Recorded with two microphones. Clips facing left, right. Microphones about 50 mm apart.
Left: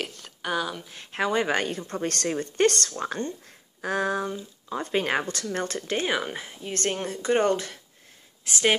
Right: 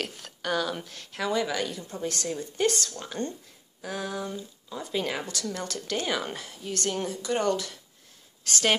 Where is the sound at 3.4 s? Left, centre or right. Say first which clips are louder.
Left 7 dB; left.